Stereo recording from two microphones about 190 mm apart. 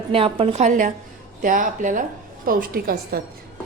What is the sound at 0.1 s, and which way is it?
A woman's voice, 30° right (ahead or behind).